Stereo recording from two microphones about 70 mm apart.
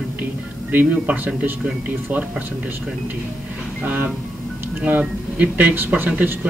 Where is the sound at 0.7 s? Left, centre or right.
Right.